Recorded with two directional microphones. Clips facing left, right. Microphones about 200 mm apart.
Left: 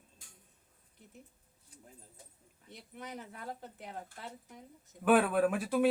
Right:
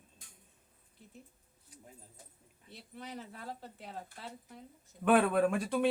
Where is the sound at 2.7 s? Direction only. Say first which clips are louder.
Even; 20° left (ahead or behind).